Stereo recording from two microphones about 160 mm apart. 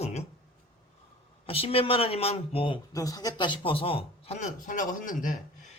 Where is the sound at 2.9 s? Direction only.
20° left (ahead or behind); by 5.3 s 55° left (ahead or behind).